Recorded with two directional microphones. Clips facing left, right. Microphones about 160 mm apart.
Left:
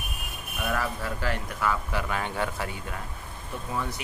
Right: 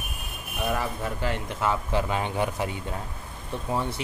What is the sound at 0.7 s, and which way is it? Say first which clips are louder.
Speech: right 1 dB; 20° right (ahead or behind).